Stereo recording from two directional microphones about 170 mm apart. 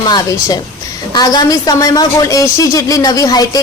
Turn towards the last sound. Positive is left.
turn(degrees=20)  # may be behind; listen again after turning